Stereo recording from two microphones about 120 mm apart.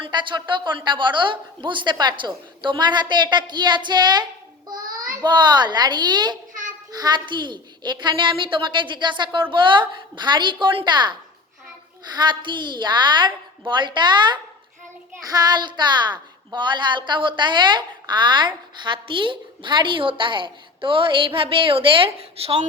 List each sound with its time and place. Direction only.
0.0 s a woman's voice: 40° right (ahead or behind)